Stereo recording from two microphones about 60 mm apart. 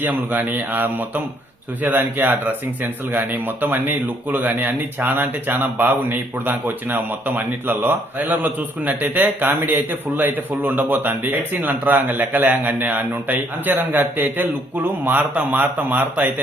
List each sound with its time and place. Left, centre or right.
0.0 s a man's voice: right